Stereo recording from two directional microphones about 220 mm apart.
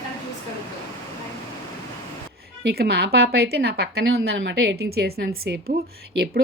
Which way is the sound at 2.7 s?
50° right (ahead or behind).